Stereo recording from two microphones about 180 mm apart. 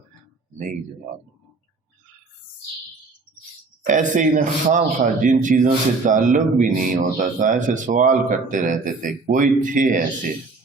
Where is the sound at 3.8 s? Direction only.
45° right (ahead or behind).